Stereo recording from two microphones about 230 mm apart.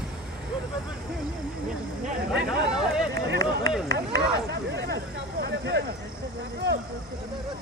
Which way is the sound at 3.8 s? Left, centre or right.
Right.